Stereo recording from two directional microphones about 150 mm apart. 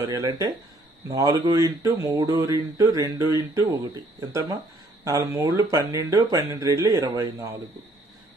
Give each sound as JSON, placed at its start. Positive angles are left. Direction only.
{"t": 0.0, "sound": "speech", "side_deg": -25}